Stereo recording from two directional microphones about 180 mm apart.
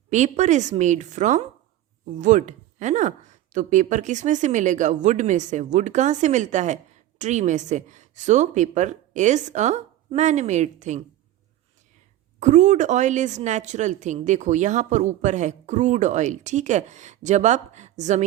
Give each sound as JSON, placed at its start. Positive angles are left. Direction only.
{"t": 0.1, "sound": "a woman's voice", "side_deg": -40}
{"t": 12.4, "sound": "a woman's voice", "side_deg": -40}